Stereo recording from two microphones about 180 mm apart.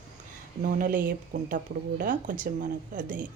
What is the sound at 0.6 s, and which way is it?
Speech, 50° right (ahead or behind).